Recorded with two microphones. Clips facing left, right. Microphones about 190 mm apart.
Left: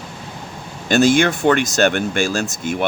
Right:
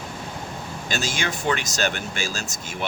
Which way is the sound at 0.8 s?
55° left (ahead or behind).